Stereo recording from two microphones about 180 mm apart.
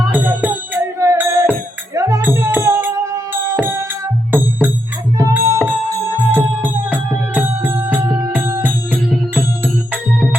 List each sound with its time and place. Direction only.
0.1 s music: 10° right (ahead or behind)